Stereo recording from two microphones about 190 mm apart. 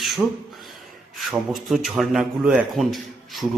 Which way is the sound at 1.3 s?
Centre (ahead or behind).